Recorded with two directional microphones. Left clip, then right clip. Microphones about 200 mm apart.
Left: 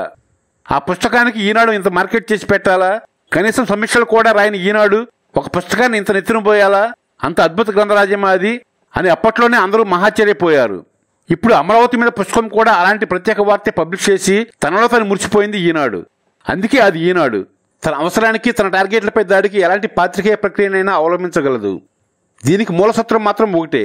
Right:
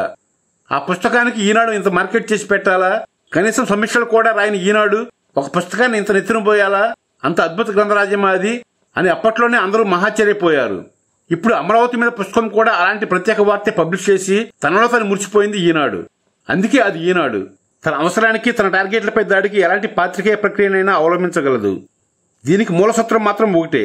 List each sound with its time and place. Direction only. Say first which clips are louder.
0.7 s a man's voice: left 2 dB; 35° left (ahead or behind)